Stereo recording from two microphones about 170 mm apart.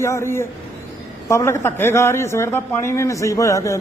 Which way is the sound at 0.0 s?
15° left (ahead or behind).